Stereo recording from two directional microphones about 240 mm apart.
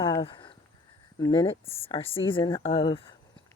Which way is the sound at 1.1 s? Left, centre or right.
Centre.